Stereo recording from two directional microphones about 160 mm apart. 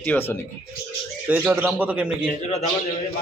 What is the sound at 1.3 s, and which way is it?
Speech, 10° right (ahead or behind).